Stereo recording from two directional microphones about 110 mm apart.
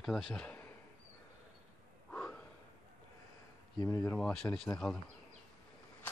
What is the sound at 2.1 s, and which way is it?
Snort, 10° left (ahead or behind).